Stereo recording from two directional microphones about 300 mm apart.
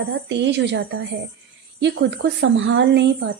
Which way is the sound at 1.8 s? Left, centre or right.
Right.